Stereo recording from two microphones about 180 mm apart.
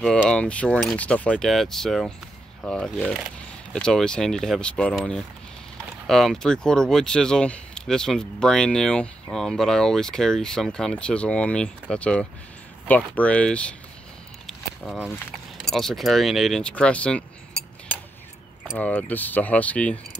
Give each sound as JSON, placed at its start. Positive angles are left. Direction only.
{"t": 0.0, "sound": "speech", "side_deg": 5}
{"t": 14.4, "sound": "a sound", "side_deg": 0}
{"t": 15.5, "sound": "speech", "side_deg": 0}